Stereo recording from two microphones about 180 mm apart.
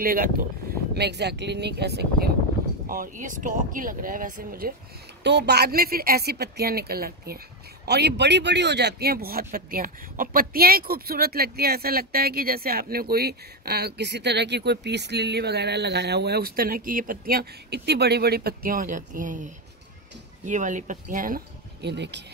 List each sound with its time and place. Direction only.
0.0 s speech: 55° right (ahead or behind)
0.9 s speech: 70° right (ahead or behind)
2.9 s speech: 50° right (ahead or behind)
5.2 s speech: 70° right (ahead or behind); by 21.4 s 50° right (ahead or behind)
21.8 s speech: 70° right (ahead or behind)